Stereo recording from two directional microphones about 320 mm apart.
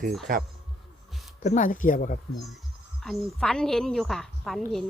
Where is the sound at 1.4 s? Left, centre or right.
Left.